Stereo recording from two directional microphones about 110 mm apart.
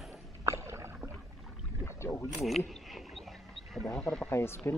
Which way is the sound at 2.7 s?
Centre (ahead or behind).